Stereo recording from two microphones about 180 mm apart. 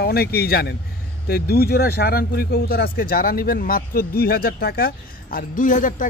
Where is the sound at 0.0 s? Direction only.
60° left (ahead or behind).